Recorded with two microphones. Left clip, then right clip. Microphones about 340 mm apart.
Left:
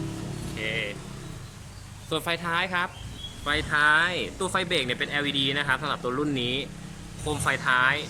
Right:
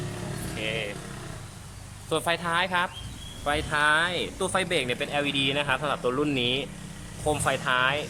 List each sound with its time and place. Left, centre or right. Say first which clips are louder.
0.6 s speech: left 1 dB; centre
2.0 s speech: right 2 dB; centre